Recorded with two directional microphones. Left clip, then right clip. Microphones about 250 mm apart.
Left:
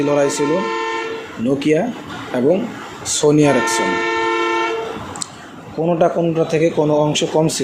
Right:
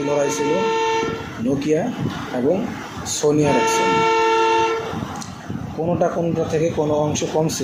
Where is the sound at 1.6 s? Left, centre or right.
Left.